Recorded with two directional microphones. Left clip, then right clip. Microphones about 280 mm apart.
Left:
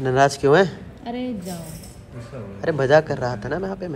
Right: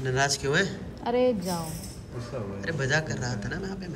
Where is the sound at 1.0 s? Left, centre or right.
Right.